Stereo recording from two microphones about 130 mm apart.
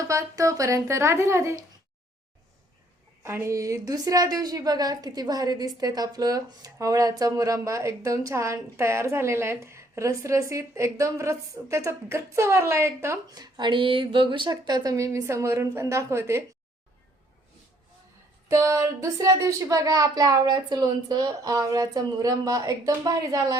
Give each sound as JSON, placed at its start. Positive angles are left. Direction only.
{"t": 0.0, "sound": "a woman's voice", "side_deg": -25}
{"t": 3.2, "sound": "a woman's voice", "side_deg": -20}
{"t": 13.2, "sound": "a woman's voice", "side_deg": -30}
{"t": 18.4, "sound": "a woman's voice", "side_deg": -25}